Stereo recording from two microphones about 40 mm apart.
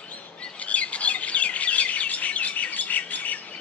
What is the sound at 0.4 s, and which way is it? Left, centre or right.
Bird, left.